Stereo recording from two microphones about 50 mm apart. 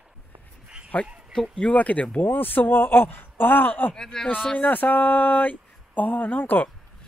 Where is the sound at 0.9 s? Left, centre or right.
Left.